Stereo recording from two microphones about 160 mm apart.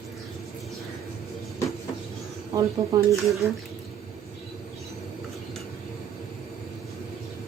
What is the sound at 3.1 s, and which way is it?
Speech, centre (ahead or behind).